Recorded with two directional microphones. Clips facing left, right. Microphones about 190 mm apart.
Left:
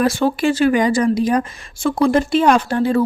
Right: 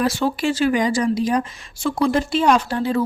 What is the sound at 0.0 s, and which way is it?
A woman's voice, 50° left (ahead or behind).